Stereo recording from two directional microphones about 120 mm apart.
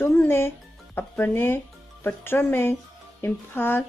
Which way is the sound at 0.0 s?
20° left (ahead or behind).